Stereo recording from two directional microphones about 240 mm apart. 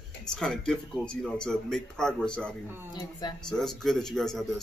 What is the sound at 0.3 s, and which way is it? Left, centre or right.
Speech, centre.